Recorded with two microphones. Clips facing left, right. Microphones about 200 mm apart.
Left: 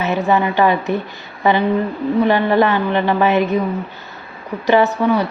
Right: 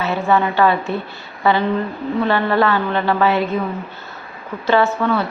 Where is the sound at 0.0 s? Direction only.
20° left (ahead or behind).